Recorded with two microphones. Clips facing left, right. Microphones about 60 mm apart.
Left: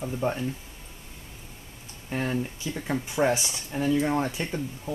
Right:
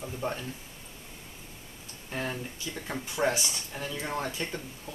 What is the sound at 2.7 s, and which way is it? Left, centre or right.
Speech, centre.